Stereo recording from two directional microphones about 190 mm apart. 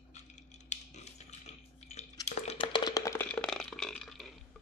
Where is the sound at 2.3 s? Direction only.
35° left (ahead or behind); by 4.3 s centre (ahead or behind).